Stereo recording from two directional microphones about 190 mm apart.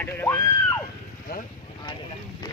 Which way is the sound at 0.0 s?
10° left (ahead or behind).